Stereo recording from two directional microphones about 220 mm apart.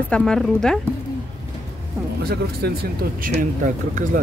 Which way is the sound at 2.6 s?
50° right (ahead or behind).